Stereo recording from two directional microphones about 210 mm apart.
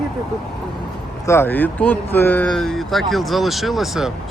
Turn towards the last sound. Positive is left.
turn(degrees=0)  # may be behind; listen again after turning